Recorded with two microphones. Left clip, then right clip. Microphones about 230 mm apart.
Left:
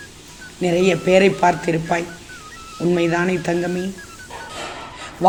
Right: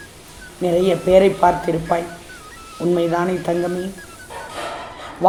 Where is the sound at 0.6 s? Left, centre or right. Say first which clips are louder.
Even; left.